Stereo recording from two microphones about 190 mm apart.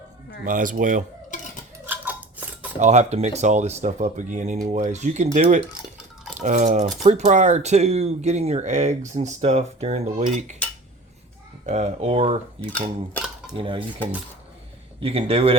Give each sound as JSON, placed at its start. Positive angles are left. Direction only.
{"t": 0.4, "sound": "a man's voice", "side_deg": -45}
{"t": 1.9, "sound": "scissors", "side_deg": -10}
{"t": 2.7, "sound": "speech", "side_deg": -35}
{"t": 11.6, "sound": "speech", "side_deg": -35}
{"t": 13.5, "sound": "cutlery", "side_deg": -30}